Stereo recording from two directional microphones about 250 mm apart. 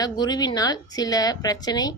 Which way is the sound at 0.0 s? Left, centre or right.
Centre.